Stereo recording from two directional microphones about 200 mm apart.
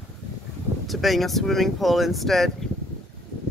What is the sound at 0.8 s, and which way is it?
Speech, centre (ahead or behind).